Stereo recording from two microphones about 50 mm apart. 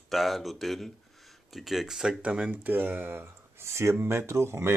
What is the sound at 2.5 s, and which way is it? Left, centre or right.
Speech, right.